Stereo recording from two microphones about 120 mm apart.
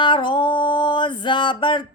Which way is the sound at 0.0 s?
40° left (ahead or behind).